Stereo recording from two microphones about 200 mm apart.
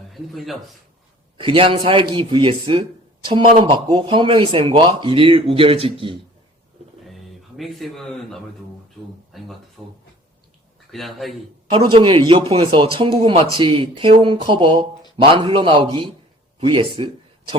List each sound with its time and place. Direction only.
0.1 s a man's voice: centre (ahead or behind)
1.4 s speech: 25° right (ahead or behind)
7.0 s a sound: centre (ahead or behind)
9.3 s speech: centre (ahead or behind)
10.9 s speech: centre (ahead or behind)
11.7 s speech: 25° right (ahead or behind)